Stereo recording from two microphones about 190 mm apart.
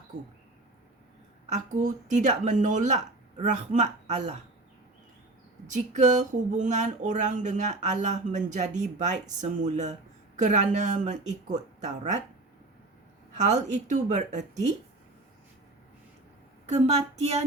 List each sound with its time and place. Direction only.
1.5 s speech: 40° right (ahead or behind)
5.6 s speech: 40° right (ahead or behind)
13.3 s speech: 40° right (ahead or behind)
16.7 s speech: 30° right (ahead or behind)